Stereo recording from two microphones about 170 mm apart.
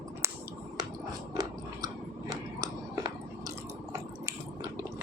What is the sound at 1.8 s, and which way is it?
Biting, 20° right (ahead or behind).